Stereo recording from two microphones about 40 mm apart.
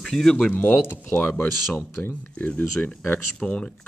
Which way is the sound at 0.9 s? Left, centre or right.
Left.